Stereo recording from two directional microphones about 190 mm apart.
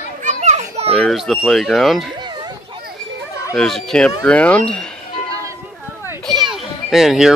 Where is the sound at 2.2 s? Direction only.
20° right (ahead or behind).